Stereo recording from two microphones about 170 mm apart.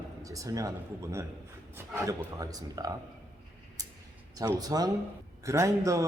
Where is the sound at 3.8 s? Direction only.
20° right (ahead or behind).